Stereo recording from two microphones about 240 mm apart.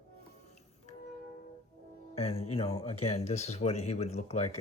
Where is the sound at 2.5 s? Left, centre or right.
Left.